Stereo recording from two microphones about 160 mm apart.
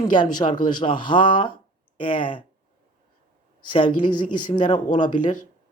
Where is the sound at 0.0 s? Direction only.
30° left (ahead or behind).